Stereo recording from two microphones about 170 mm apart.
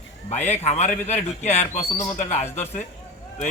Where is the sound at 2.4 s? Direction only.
15° left (ahead or behind).